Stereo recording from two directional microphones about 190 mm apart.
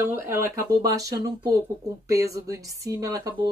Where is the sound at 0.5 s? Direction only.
20° right (ahead or behind).